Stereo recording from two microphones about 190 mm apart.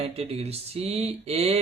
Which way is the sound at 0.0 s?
30° right (ahead or behind).